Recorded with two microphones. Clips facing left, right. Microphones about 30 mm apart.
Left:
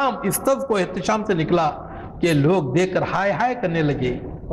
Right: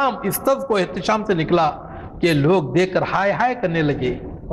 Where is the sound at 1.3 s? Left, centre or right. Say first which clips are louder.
Right 2 dB; centre.